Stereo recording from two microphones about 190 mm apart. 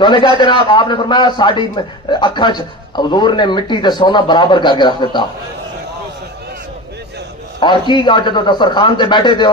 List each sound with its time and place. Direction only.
0.0 s a man's voice: 25° left (ahead or behind)
7.9 s a man's voice: 25° left (ahead or behind)